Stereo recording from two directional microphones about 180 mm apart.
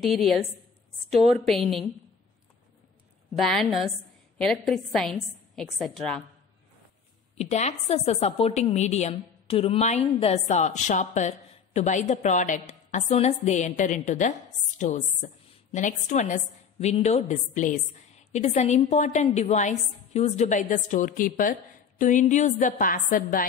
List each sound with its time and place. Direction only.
0.0 s a woman's voice: centre (ahead or behind)
3.3 s a woman's voice: centre (ahead or behind)
7.3 s a woman's voice: 40° left (ahead or behind)